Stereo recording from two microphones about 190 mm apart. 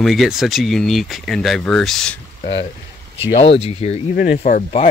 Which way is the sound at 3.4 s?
30° left (ahead or behind).